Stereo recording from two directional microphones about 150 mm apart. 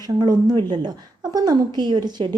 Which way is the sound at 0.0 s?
25° right (ahead or behind).